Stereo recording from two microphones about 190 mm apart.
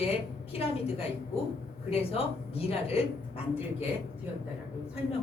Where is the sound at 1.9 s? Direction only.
30° left (ahead or behind).